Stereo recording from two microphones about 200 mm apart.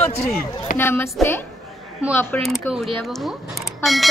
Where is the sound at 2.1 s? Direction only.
10° left (ahead or behind).